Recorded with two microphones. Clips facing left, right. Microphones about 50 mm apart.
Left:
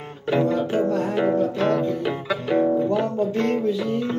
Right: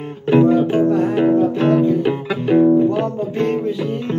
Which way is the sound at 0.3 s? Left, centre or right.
Centre.